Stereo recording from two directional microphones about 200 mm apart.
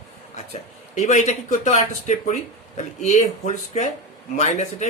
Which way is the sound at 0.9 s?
35° left (ahead or behind).